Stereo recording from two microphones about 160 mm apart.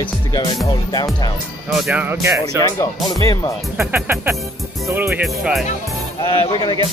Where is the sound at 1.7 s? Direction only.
Centre (ahead or behind).